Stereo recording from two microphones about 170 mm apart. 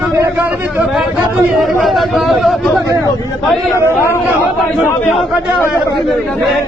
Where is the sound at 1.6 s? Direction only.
Centre (ahead or behind).